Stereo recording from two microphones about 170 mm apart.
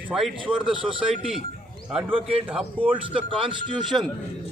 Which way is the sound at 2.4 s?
10° right (ahead or behind).